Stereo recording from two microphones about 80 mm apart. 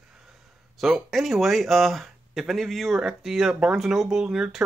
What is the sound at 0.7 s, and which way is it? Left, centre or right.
Speech, centre.